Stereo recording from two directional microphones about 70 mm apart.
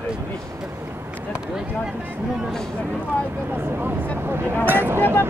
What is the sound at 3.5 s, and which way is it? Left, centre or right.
Speech, right.